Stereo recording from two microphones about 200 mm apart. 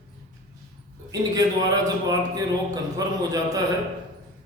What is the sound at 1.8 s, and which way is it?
A man's voice, 20° right (ahead or behind).